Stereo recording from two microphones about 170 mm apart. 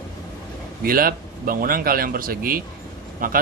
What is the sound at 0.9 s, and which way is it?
Speech, 60° right (ahead or behind).